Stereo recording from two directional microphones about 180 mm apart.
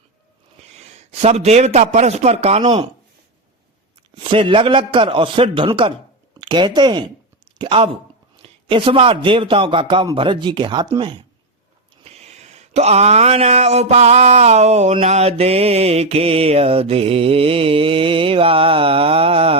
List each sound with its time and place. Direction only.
0.8 s a man's voice: 35° right (ahead or behind)
4.1 s a man's voice: 30° right (ahead or behind)
12.0 s a sound: 35° right (ahead or behind)